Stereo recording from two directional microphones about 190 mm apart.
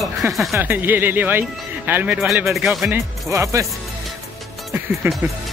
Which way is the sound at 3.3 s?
15° right (ahead or behind).